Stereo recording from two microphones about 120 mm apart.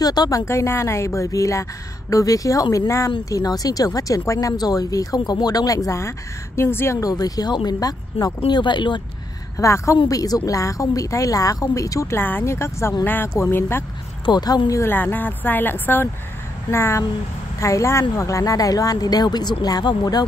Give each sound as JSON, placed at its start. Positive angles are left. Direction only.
{"t": 0.0, "sound": "speech", "side_deg": 35}
{"t": 0.5, "sound": "speech", "side_deg": 20}
{"t": 9.6, "sound": "speech", "side_deg": 25}
{"t": 14.2, "sound": "a woman's voice", "side_deg": 35}